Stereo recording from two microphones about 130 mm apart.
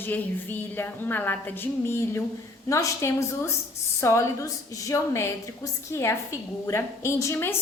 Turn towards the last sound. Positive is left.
turn(degrees=20)  # may be behind; listen again after turning